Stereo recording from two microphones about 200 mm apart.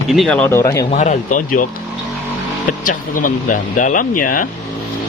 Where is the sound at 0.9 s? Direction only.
35° left (ahead or behind).